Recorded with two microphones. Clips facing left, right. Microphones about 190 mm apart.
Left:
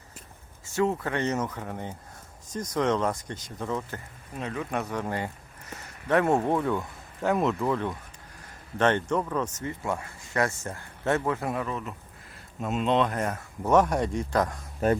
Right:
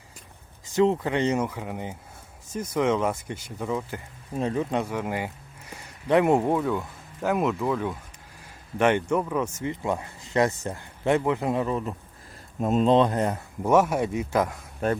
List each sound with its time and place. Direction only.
0.8 s speech: 15° right (ahead or behind)
4.4 s speech: 30° right (ahead or behind)
4.8 s speech: 10° right (ahead or behind)